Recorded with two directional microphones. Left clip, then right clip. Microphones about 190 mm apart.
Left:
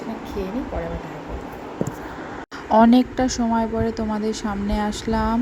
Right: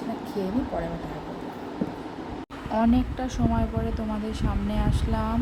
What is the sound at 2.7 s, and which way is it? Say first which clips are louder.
Speech: left 9 dB; 30° left (ahead or behind).